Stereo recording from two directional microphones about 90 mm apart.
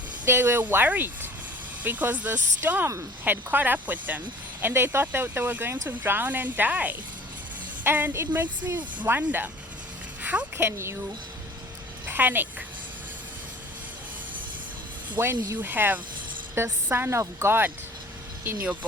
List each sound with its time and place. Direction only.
0.3 s speech: 25° right (ahead or behind)
10.6 s speech: 30° right (ahead or behind)
12.0 s a woman's voice: 20° right (ahead or behind)
15.2 s speech: 25° right (ahead or behind)
18.4 s speech: 15° right (ahead or behind)